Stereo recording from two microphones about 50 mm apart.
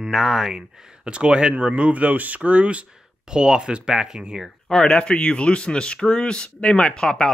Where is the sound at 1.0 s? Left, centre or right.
Right.